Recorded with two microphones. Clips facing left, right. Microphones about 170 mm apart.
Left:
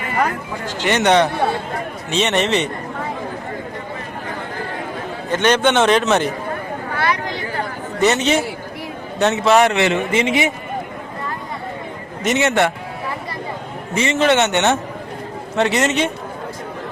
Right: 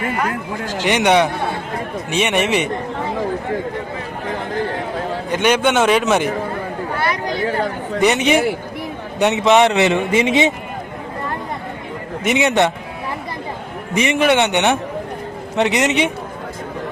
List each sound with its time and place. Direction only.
0.9 s a man's voice: 10° right (ahead or behind)
5.3 s a man's voice: 10° right (ahead or behind)
8.0 s a man's voice: 15° right (ahead or behind)
12.2 s a man's voice: 15° right (ahead or behind)
13.9 s a man's voice: 15° right (ahead or behind)